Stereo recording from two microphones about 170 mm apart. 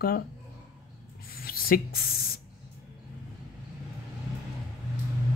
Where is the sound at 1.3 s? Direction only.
60° left (ahead or behind).